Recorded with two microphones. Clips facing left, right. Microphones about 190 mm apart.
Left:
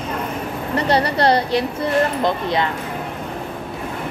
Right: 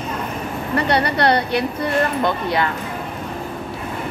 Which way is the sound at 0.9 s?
30° left (ahead or behind).